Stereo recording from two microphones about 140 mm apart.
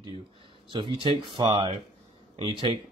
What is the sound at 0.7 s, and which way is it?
Speech, 35° right (ahead or behind).